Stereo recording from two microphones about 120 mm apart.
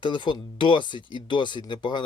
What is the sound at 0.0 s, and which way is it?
Speech, 40° left (ahead or behind).